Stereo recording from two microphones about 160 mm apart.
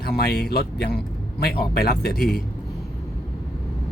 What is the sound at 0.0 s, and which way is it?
Speech, 80° left.